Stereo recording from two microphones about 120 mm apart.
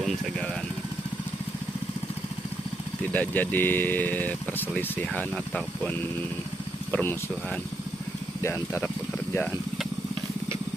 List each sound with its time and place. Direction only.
3.1 s speech: 15° left (ahead or behind)
8.4 s speech: 25° left (ahead or behind)